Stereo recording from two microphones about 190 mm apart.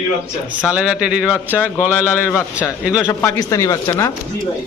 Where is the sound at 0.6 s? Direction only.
5° right (ahead or behind).